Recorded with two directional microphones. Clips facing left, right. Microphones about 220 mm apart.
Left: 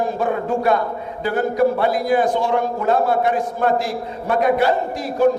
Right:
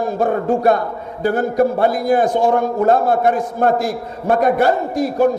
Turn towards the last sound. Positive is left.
turn(degrees=-45)  # may be behind; listen again after turning